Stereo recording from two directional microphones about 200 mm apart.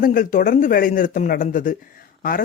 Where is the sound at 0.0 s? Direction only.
45° left (ahead or behind).